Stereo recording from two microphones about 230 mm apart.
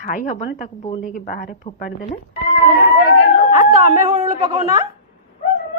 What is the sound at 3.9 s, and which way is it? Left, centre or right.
Speech, right.